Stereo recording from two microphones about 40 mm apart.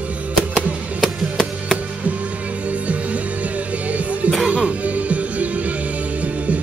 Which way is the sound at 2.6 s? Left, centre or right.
Right.